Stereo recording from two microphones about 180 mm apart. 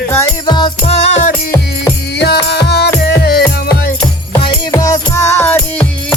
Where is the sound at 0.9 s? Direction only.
40° left (ahead or behind).